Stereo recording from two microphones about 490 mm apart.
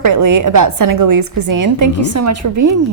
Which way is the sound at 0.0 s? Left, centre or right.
Right.